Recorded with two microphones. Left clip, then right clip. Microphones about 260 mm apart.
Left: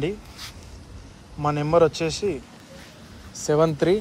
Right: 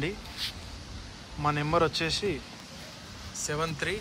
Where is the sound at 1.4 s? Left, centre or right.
Centre.